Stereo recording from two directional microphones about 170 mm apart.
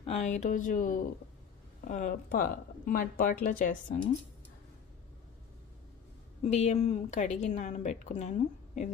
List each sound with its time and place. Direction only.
0.0 s a woman's voice: 40° left (ahead or behind)
6.4 s a woman's voice: 40° left (ahead or behind)